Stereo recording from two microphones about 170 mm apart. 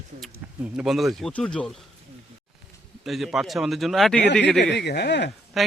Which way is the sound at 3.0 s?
Centre (ahead or behind).